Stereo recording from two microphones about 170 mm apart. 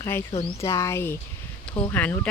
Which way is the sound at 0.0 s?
15° left (ahead or behind).